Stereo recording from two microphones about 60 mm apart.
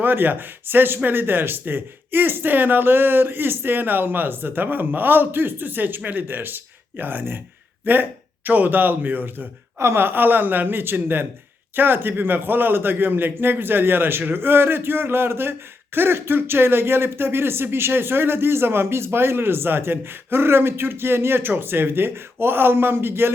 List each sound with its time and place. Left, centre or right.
0.0 s speech: right
9.7 s speech: right